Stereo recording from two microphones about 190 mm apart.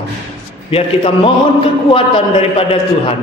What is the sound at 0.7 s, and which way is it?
A man's voice, 30° left (ahead or behind).